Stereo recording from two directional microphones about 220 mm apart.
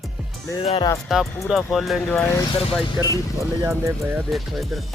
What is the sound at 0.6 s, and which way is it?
Speech, 25° left (ahead or behind).